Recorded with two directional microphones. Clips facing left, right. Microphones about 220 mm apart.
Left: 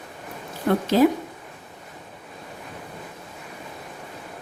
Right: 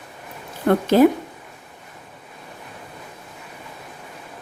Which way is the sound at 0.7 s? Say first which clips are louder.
Right 4 dB; 55° right (ahead or behind).